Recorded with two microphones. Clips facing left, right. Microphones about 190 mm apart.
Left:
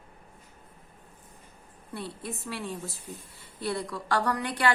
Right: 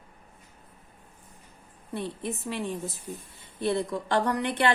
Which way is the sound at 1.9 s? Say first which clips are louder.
Right 4 dB; 20° right (ahead or behind).